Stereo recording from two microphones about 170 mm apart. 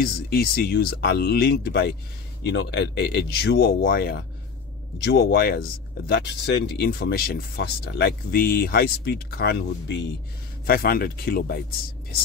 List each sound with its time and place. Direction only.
0.0 s speech: 65° left (ahead or behind); by 10.0 s 80° left
10.7 s speech: 60° left (ahead or behind)